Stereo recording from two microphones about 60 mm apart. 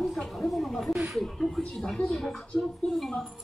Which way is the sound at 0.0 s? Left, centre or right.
Centre.